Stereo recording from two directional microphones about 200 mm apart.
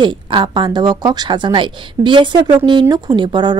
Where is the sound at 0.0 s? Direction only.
25° right (ahead or behind).